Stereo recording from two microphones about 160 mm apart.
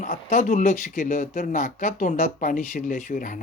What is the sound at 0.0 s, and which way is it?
Speech, 50° left (ahead or behind).